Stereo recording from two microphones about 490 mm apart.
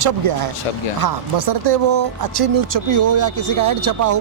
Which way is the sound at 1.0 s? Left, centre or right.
Right.